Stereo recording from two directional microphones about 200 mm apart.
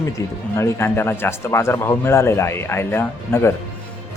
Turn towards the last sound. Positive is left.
turn(degrees=10)  # may be behind; listen again after turning